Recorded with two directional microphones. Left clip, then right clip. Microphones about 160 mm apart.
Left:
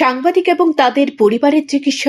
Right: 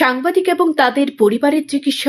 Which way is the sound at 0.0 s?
10° left (ahead or behind).